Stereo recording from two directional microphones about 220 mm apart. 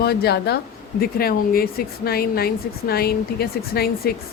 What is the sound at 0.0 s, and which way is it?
A woman's voice, 45° left (ahead or behind).